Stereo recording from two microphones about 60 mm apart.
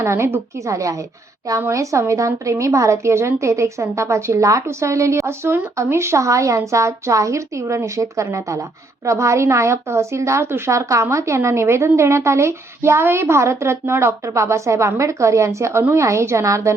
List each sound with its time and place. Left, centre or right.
0.0 s a woman's voice: right
5.2 s speech: right
5.7 s a woman's voice: right